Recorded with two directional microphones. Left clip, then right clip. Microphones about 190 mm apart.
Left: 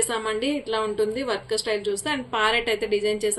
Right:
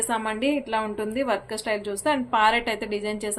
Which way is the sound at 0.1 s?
50° right (ahead or behind).